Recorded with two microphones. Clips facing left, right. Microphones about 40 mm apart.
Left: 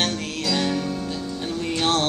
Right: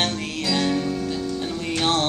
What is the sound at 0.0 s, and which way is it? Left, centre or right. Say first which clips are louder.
Music: even; centre.